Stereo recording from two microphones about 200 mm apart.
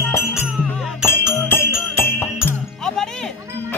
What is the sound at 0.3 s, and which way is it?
Music, centre (ahead or behind).